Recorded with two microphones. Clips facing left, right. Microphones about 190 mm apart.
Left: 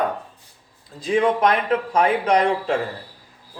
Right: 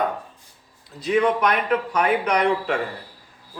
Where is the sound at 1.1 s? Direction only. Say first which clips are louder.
Left 1 dB; 30° left (ahead or behind).